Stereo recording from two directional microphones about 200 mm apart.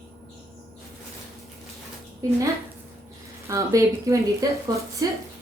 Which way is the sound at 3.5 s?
15° right (ahead or behind).